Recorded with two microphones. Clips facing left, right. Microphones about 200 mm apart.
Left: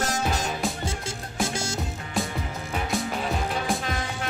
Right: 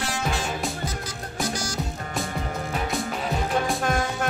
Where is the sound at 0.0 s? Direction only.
40° left (ahead or behind).